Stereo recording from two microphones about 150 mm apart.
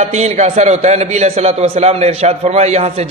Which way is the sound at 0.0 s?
50° right (ahead or behind).